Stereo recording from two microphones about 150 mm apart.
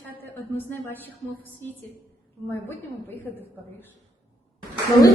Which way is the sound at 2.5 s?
15° left (ahead or behind).